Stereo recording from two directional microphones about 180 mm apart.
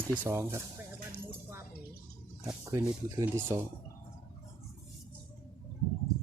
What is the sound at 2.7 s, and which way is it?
Speech, 15° right (ahead or behind).